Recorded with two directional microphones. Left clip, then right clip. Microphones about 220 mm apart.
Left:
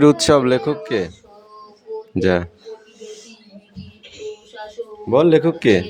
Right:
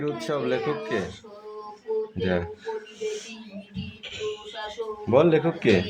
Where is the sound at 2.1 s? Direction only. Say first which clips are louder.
Left 9 dB; 40° left (ahead or behind).